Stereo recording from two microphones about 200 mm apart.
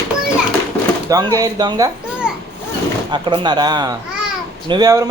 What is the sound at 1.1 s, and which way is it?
Speech, 20° right (ahead or behind).